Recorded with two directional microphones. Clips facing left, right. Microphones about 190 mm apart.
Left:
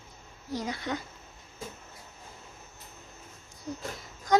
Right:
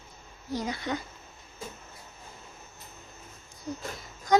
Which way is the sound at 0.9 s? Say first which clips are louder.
Right 1 dB; 20° right (ahead or behind).